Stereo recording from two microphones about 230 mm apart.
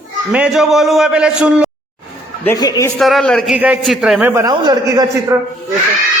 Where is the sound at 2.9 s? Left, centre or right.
Centre.